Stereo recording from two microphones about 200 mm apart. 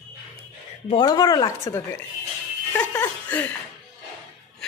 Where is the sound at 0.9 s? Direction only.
20° left (ahead or behind).